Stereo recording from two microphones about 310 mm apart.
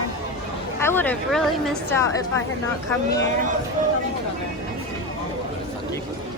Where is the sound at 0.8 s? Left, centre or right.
Centre.